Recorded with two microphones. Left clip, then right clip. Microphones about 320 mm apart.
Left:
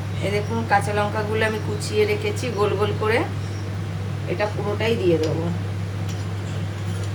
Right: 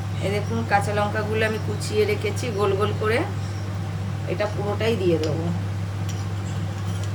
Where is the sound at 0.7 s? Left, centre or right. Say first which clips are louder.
Left 1 dB; centre.